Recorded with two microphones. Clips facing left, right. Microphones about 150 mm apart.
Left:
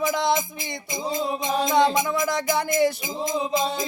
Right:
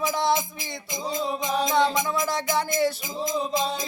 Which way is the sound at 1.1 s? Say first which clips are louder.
Left 1 dB; 10° left (ahead or behind).